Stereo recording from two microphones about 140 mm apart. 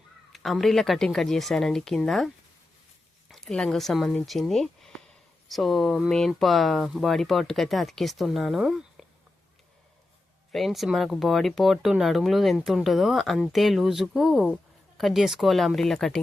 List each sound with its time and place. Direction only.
0.3 s speech: centre (ahead or behind)
10.5 s speech: centre (ahead or behind)